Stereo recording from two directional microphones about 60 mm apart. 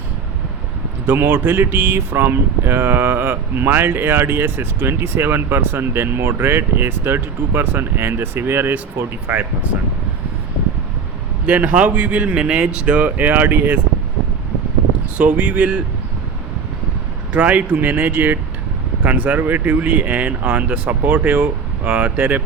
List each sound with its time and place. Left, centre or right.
1.0 s speech: right
11.4 s speech: right
15.2 s speech: right
17.3 s speech: right